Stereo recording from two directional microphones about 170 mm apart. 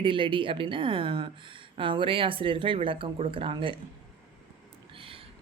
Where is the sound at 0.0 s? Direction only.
30° right (ahead or behind).